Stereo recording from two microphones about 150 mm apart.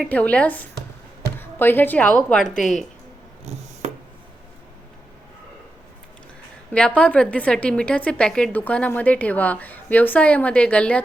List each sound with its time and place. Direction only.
0.0 s a woman's voice: 10° left (ahead or behind)
3.5 s a sound: 45° right (ahead or behind)
6.7 s a woman's voice: 10° left (ahead or behind)